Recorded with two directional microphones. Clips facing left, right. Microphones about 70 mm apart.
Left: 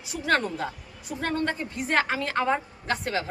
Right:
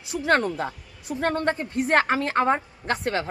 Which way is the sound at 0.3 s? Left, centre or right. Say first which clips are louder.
Right 3 dB; right.